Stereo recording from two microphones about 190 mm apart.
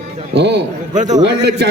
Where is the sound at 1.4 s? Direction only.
65° right (ahead or behind).